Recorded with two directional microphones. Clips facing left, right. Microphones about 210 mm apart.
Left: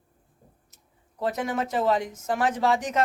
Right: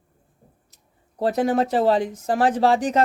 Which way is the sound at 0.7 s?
35° right (ahead or behind).